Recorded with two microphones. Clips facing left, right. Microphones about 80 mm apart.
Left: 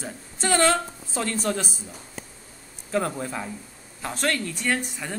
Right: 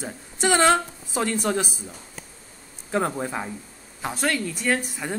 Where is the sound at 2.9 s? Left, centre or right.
Right.